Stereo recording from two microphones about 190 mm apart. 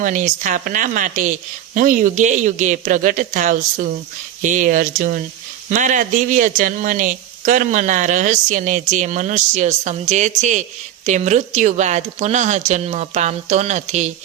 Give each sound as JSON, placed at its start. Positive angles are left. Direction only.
{"t": 0.0, "sound": "speech", "side_deg": -40}